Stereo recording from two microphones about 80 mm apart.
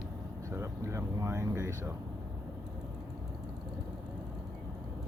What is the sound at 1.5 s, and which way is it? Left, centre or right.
Speech, right.